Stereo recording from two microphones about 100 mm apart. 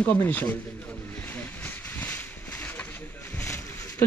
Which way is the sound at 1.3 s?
20° left (ahead or behind).